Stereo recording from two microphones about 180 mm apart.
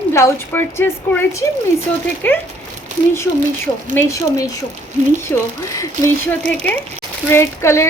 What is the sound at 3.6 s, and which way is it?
Speech, 15° left (ahead or behind).